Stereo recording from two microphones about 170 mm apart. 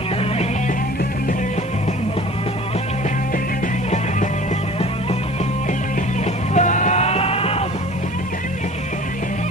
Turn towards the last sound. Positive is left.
turn(degrees=35)  # may be behind; listen again after turning